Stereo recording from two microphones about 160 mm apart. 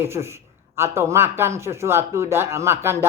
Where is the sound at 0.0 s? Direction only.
15° right (ahead or behind).